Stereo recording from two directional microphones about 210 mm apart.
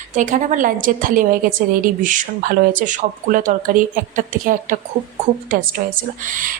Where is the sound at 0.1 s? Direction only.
35° right (ahead or behind).